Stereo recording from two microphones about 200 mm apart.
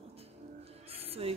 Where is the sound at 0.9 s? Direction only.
30° right (ahead or behind).